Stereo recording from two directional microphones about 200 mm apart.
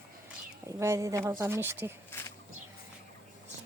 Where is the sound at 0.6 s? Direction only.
15° right (ahead or behind).